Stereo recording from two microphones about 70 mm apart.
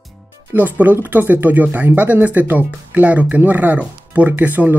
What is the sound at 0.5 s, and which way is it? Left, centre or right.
Speech, right.